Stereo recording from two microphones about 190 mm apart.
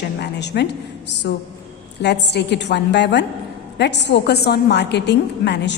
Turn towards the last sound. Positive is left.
turn(degrees=65)  # may be behind; listen again after turning